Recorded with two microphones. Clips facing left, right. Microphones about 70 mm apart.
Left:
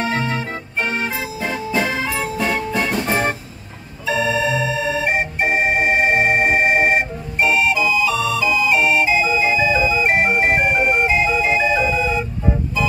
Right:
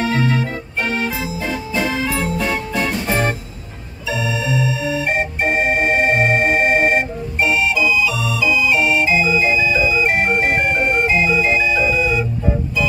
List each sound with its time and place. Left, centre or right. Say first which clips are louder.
0.0 s organ: right 3 dB; left
2.0 s music: right 1 dB; centre
3.1 s music: right 2 dB; left
4.1 s organ: left 3 dB; left
5.0 s organ: even; centre
7.4 s music: even; left
10.6 s music: even; centre
11.1 s organ: right 1 dB; left